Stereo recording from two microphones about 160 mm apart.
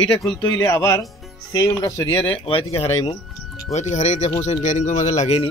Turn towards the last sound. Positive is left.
turn(degrees=45)  # may be behind; listen again after turning